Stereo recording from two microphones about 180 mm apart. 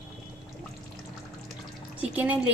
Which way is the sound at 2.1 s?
10° right (ahead or behind).